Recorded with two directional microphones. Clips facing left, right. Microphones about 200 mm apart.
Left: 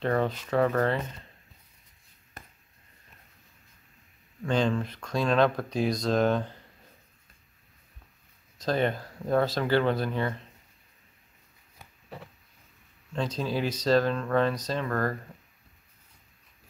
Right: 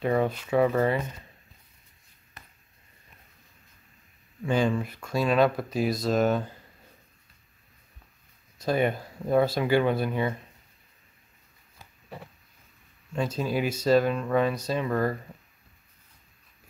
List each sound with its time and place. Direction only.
0.0 s speech: 10° right (ahead or behind)
2.4 s a sound: 45° left (ahead or behind)
4.4 s speech: 10° right (ahead or behind)
8.5 s speech: 10° right (ahead or behind)
13.1 s speech: 10° right (ahead or behind)